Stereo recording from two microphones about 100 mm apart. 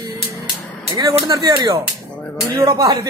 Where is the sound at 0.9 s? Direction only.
40° right (ahead or behind).